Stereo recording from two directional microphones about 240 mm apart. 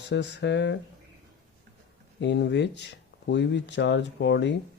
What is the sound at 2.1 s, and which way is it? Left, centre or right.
Speech, left.